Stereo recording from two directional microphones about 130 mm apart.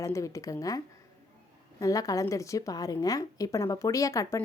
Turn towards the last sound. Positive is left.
turn(degrees=20)  # may be behind; listen again after turning